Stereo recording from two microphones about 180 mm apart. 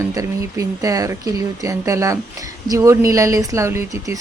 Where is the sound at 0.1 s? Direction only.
20° right (ahead or behind).